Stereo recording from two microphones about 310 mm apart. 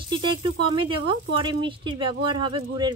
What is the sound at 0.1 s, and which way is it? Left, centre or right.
Speech, centre.